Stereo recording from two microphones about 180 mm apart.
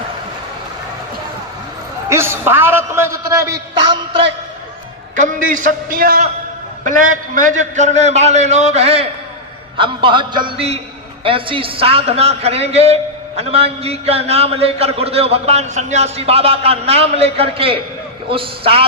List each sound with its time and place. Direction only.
2.0 s a man's voice: 15° right (ahead or behind)
5.1 s a man's voice: 45° right (ahead or behind); by 18.9 s 30° right (ahead or behind)